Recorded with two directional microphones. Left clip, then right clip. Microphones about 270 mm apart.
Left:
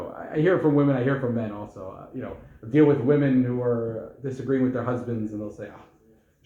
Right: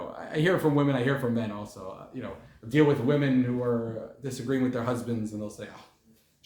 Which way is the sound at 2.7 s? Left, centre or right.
Right.